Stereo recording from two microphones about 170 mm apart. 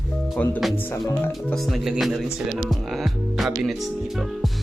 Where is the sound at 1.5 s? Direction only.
Centre (ahead or behind).